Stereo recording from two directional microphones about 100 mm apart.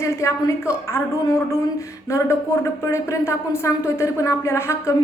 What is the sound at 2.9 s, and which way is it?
A woman's voice, 30° left (ahead or behind).